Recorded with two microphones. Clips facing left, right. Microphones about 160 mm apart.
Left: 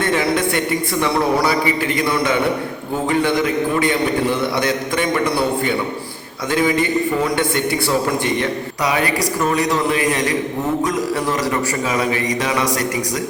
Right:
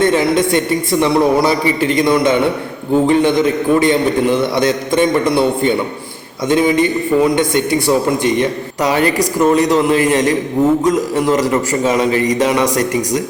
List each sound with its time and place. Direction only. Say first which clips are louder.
0.0 s a man's voice: right 5 dB; 20° right (ahead or behind)
6.5 s a man's voice: right 4 dB; 20° right (ahead or behind)
9.6 s a man's voice: right 6 dB; 30° right (ahead or behind)